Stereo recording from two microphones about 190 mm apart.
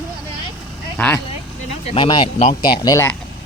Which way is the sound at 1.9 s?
25° left (ahead or behind).